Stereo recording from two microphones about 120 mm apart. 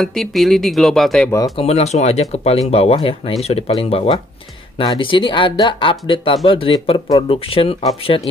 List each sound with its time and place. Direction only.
0.0 s speech: centre (ahead or behind)
1.6 s speech: 60° left (ahead or behind)